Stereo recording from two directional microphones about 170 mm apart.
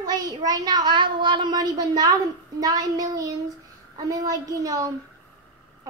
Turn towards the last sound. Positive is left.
turn(degrees=-20)  # may be behind; listen again after turning